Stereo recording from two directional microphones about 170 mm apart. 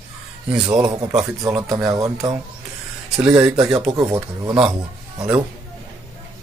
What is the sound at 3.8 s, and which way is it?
A man's voice, 20° right (ahead or behind).